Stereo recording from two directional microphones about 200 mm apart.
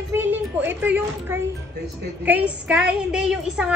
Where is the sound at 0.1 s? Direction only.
10° right (ahead or behind).